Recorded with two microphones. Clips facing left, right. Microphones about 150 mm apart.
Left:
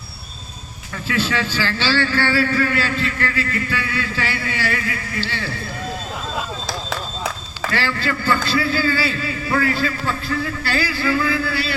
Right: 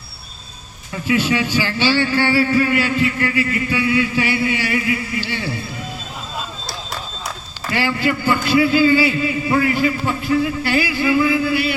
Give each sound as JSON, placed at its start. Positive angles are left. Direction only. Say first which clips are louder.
{"t": 1.0, "sound": "a man's voice", "louder": "right 4 dB", "side_deg": -15}
{"t": 7.7, "sound": "a man's voice", "louder": "right 4 dB", "side_deg": -15}